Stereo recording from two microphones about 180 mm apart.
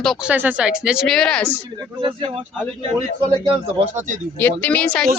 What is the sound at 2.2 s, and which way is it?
Speech, 30° right (ahead or behind).